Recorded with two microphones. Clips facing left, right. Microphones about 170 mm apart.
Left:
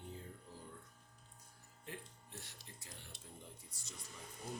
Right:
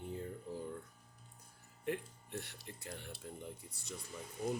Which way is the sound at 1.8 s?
65° right (ahead or behind).